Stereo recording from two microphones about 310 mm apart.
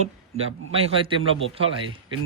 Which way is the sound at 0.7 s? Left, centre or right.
Centre.